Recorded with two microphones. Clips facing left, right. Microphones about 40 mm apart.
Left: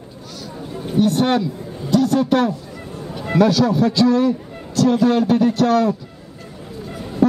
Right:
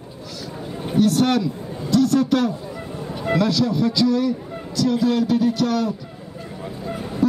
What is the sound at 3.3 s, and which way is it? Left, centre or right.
A man's voice, left.